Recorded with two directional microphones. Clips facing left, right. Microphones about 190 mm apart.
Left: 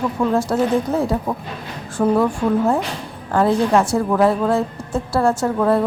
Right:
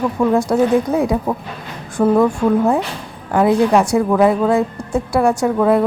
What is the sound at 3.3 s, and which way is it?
A woman's voice, 15° right (ahead or behind).